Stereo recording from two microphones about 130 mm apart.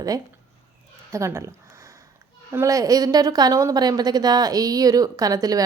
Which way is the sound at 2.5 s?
25° right (ahead or behind).